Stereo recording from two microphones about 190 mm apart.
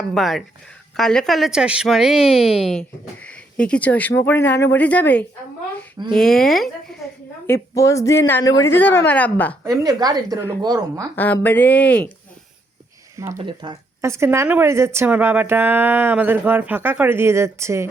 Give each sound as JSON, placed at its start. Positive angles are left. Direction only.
{"t": 0.1, "sound": "speech", "side_deg": 0}
{"t": 7.4, "sound": "a woman's voice", "side_deg": 15}
{"t": 9.6, "sound": "a woman's voice", "side_deg": -20}
{"t": 11.1, "sound": "a woman's voice", "side_deg": 10}
{"t": 13.4, "sound": "speech", "side_deg": -25}